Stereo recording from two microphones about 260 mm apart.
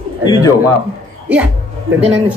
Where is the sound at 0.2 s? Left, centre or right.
Centre.